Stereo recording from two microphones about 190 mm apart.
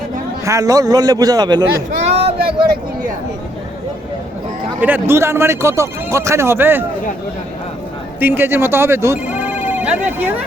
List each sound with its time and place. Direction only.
0.4 s a man's voice: 15° right (ahead or behind)
2.0 s a sound: 30° right (ahead or behind)
4.8 s a man's voice: 10° right (ahead or behind)
8.2 s speech: 10° right (ahead or behind)